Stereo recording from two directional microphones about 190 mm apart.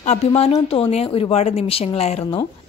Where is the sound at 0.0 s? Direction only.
35° left (ahead or behind).